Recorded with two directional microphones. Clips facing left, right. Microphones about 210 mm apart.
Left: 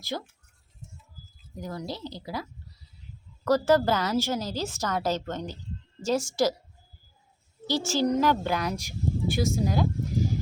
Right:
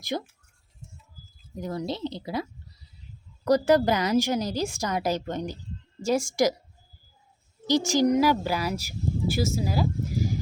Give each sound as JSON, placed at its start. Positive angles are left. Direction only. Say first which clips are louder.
{"t": 0.0, "sound": "a woman's voice", "louder": "right 3 dB", "side_deg": -15}
{"t": 1.5, "sound": "a woman's voice", "louder": "right 4 dB", "side_deg": -25}
{"t": 7.7, "sound": "speech", "louder": "right 4 dB", "side_deg": -15}